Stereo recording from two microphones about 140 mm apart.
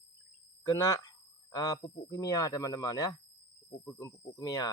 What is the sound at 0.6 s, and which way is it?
Speech, 20° left (ahead or behind).